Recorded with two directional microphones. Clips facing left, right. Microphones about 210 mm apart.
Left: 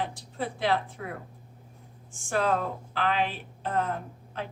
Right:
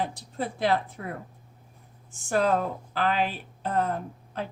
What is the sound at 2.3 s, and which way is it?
A woman's voice, 40° right (ahead or behind).